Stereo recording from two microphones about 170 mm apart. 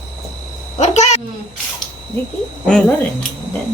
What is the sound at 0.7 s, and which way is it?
Speech, 45° left (ahead or behind).